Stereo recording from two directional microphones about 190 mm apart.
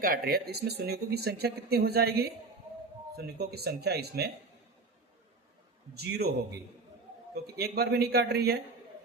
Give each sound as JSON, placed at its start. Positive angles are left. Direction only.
{"t": 0.0, "sound": "speech", "side_deg": -50}
{"t": 5.9, "sound": "speech", "side_deg": -60}
{"t": 7.4, "sound": "speech", "side_deg": -55}